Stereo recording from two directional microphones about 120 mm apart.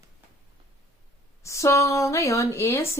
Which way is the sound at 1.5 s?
25° left (ahead or behind).